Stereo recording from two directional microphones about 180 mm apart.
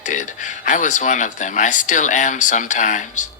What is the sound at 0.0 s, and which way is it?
A woman's voice, 45° left (ahead or behind).